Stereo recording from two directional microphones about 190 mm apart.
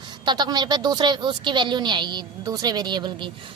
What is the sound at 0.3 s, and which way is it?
A woman's voice, 20° right (ahead or behind).